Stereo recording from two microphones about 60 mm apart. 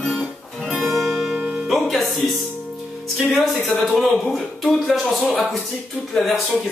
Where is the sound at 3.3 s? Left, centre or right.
Centre.